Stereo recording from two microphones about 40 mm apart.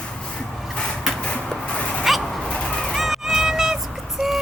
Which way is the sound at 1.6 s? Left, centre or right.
Left.